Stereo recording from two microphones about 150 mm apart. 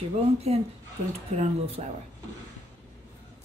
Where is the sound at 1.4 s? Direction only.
45° right (ahead or behind).